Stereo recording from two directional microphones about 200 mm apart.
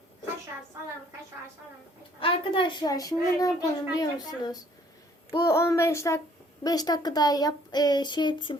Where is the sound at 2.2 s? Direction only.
25° left (ahead or behind).